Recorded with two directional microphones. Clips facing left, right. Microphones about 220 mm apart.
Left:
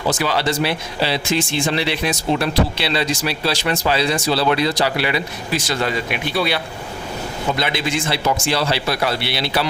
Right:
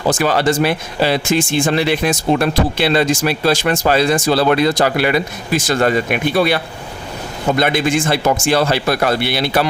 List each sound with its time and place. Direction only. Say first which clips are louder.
0.1 s speech: right 5 dB; 50° right (ahead or behind)